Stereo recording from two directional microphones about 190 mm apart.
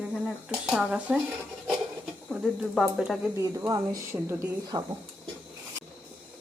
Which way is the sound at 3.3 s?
15° right (ahead or behind).